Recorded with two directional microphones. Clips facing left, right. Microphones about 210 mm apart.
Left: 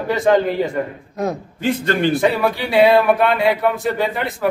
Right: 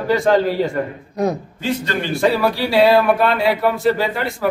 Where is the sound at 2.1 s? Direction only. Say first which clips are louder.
Even; centre (ahead or behind).